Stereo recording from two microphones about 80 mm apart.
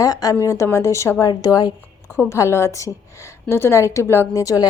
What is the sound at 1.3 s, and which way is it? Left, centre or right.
Speech, left.